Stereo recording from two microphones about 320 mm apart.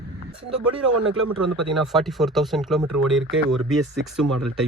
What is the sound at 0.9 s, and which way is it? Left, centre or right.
Speech, right.